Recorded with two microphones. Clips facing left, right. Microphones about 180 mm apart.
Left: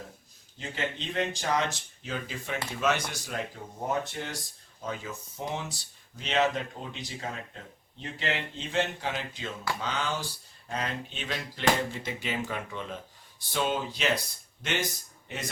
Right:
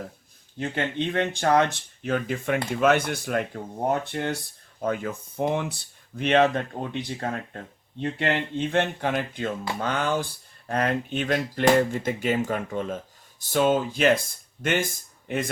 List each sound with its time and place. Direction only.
0.6 s speech: 60° right (ahead or behind)